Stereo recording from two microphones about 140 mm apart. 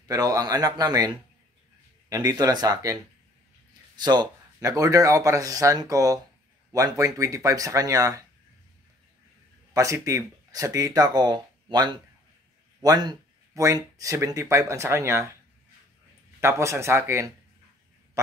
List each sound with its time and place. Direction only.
0.1 s speech: 25° right (ahead or behind)
9.8 s speech: 25° right (ahead or behind)
16.3 s speech: 20° right (ahead or behind)
18.2 s quack: 20° right (ahead or behind)